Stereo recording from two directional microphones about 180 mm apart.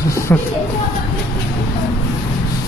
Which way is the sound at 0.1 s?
15° left (ahead or behind).